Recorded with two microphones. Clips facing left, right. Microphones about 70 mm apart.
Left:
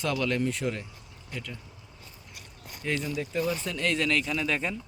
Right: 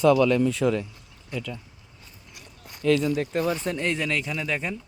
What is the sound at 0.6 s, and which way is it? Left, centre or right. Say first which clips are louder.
Speech: right 8 dB; right.